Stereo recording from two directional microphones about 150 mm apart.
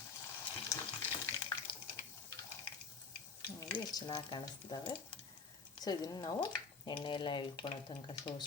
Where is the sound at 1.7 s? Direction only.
35° left (ahead or behind).